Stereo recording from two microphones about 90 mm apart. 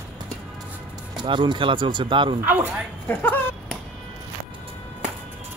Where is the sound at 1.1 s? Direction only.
55° right (ahead or behind).